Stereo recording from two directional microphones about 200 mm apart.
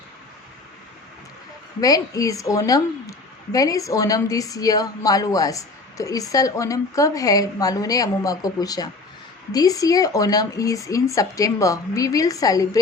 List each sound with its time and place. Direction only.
1.8 s a woman's voice: 15° left (ahead or behind)